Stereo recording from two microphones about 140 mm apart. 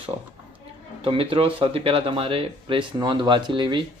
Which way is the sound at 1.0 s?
40° right (ahead or behind).